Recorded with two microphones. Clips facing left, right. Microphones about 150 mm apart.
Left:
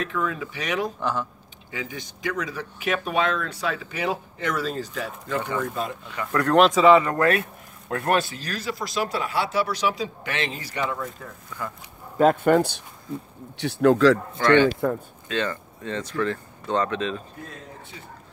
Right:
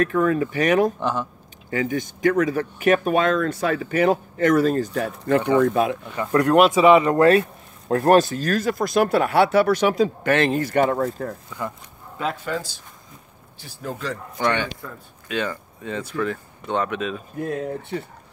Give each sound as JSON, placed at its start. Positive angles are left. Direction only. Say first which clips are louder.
{"t": 0.0, "sound": "speech", "louder": "right 8 dB", "side_deg": -50}
{"t": 0.9, "sound": "speech", "louder": "right 2 dB", "side_deg": -20}
{"t": 1.7, "sound": "speech", "louder": "right 10 dB", "side_deg": -50}
{"t": 6.1, "sound": "speech", "louder": "right 4 dB", "side_deg": -25}
{"t": 6.5, "sound": "speech", "louder": "right 1 dB", "side_deg": -10}
{"t": 12.2, "sound": "speech", "louder": "left 9 dB", "side_deg": 55}
{"t": 13.6, "sound": "speech", "louder": "left 14 dB", "side_deg": 75}
{"t": 14.4, "sound": "speech", "louder": "left 5 dB", "side_deg": -15}
{"t": 17.4, "sound": "speech", "louder": "right 14 dB", "side_deg": -60}